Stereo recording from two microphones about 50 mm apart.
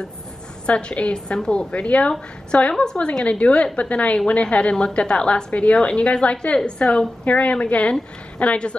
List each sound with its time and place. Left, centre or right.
0.7 s a woman's voice: left